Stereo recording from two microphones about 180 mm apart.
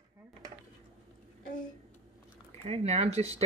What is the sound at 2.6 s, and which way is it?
Speech, 35° right (ahead or behind).